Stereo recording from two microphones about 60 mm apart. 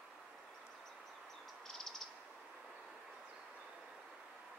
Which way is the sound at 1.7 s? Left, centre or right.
Centre.